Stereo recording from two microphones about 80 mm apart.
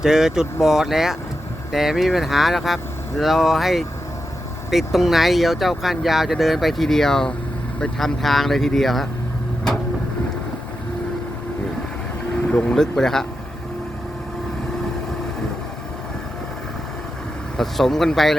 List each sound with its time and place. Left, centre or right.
0.0 s speech: centre
12.5 s speech: centre
17.6 s speech: centre